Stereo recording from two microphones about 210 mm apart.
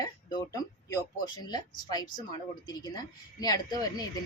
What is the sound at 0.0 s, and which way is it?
A woman's voice, 20° left (ahead or behind).